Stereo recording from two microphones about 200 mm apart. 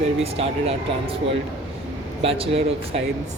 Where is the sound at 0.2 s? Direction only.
30° right (ahead or behind).